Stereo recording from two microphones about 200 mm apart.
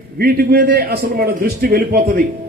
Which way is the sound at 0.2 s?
50° right (ahead or behind).